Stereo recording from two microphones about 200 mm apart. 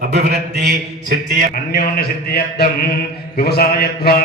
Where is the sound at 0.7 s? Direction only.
40° right (ahead or behind).